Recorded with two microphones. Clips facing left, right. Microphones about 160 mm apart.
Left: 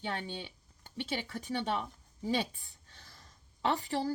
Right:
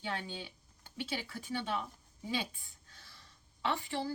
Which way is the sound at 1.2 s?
40° left (ahead or behind).